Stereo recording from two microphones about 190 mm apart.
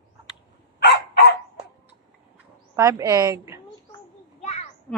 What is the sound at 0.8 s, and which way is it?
Dog, 60° left (ahead or behind).